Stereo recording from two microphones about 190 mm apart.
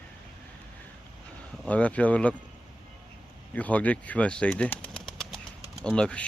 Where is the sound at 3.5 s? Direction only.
5° left (ahead or behind).